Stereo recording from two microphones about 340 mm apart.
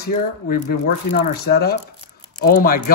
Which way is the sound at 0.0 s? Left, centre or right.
Left.